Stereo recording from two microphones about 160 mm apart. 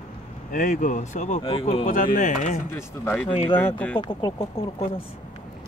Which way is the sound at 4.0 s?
30° left (ahead or behind).